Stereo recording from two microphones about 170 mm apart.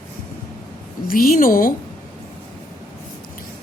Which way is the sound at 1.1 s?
55° left (ahead or behind).